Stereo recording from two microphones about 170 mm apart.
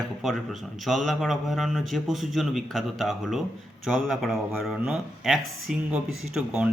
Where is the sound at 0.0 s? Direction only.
Centre (ahead or behind).